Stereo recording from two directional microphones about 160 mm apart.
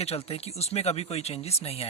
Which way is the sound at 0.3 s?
40° left (ahead or behind).